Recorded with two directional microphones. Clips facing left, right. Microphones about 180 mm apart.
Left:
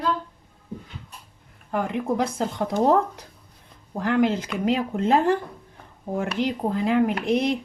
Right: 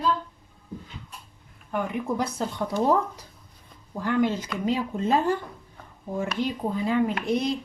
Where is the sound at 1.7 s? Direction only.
90° left.